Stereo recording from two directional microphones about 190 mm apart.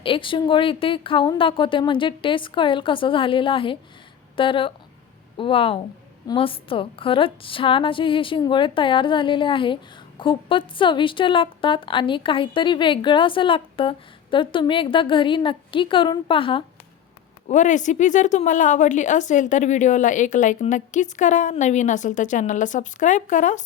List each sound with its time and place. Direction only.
0.0 s a woman's voice: 25° left (ahead or behind)
17.5 s speech: 40° left (ahead or behind)